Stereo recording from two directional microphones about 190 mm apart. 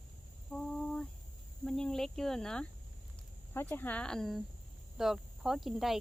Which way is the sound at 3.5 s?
10° left (ahead or behind).